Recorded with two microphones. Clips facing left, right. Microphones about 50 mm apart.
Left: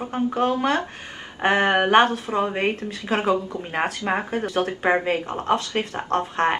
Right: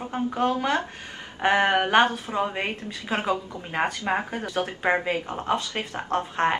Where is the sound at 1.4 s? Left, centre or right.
Left.